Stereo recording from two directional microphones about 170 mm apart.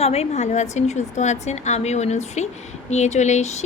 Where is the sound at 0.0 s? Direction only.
35° left (ahead or behind).